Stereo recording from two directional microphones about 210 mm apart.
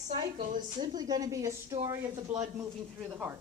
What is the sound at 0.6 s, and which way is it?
A woman's voice, 20° right (ahead or behind).